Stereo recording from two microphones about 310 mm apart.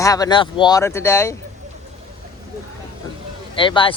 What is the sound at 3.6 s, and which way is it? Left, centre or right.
Speech, centre.